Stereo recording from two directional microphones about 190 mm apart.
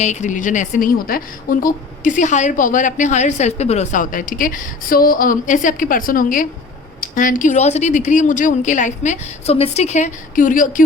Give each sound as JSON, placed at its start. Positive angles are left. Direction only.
{"t": 0.0, "sound": "a woman's voice", "side_deg": 40}